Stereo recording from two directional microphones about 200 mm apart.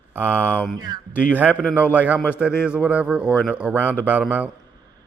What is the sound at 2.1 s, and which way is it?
Speech, 10° left (ahead or behind).